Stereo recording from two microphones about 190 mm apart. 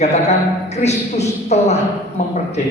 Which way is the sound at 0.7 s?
35° left (ahead or behind).